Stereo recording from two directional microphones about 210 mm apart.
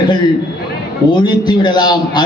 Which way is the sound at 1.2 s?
20° left (ahead or behind).